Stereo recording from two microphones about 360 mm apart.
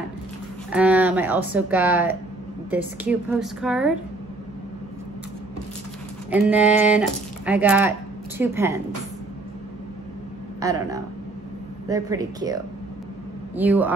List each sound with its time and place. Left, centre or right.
0.7 s speech: centre
6.3 s speech: centre
10.6 s speech: centre
13.6 s speech: centre